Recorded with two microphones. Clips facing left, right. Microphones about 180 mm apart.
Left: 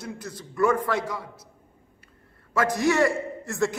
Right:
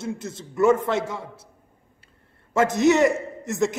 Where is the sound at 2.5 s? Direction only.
25° right (ahead or behind).